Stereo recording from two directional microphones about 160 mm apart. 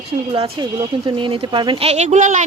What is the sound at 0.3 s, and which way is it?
Speech, 35° right (ahead or behind).